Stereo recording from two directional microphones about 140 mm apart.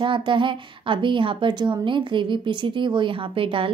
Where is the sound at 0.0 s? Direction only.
35° right (ahead or behind).